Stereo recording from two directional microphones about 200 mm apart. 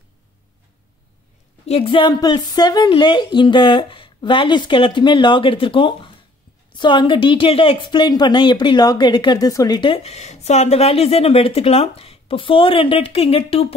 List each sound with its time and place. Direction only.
1.7 s a woman's voice: 25° left (ahead or behind)